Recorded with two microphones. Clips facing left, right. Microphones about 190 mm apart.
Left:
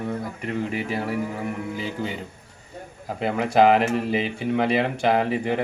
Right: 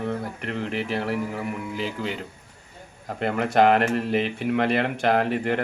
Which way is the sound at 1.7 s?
90° right.